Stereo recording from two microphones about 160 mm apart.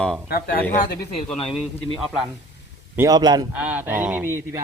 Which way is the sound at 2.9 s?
15° right (ahead or behind).